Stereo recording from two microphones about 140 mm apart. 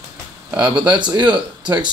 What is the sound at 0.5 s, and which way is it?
Speech, 10° right (ahead or behind).